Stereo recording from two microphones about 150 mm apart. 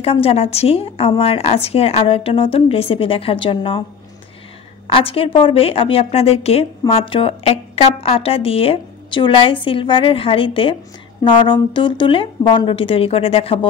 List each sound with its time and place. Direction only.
0.0 s a woman's voice: 40° left (ahead or behind)
4.8 s a woman's voice: 35° left (ahead or behind)